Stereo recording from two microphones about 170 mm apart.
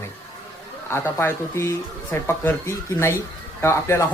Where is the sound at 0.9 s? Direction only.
15° left (ahead or behind).